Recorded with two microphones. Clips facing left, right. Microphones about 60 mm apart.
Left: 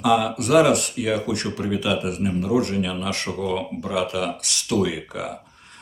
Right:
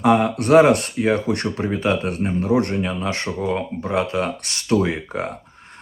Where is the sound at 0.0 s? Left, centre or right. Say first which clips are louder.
Right 3 dB; right.